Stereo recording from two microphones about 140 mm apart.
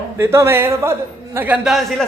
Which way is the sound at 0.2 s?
20° right (ahead or behind).